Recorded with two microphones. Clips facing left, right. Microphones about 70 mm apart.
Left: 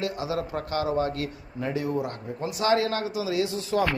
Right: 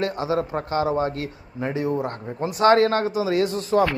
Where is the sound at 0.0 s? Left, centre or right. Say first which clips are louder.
Right 5 dB; right.